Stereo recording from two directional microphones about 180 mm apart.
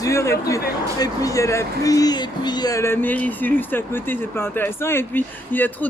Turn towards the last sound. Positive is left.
turn(degrees=10)  # may be behind; listen again after turning